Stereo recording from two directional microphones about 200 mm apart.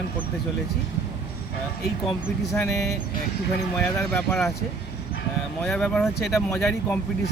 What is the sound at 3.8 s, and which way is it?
Speech, 5° left (ahead or behind).